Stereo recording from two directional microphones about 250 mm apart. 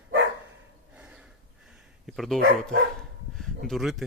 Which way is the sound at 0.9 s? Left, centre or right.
Centre.